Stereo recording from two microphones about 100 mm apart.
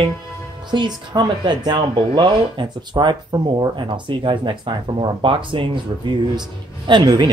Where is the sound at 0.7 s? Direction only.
50° right (ahead or behind).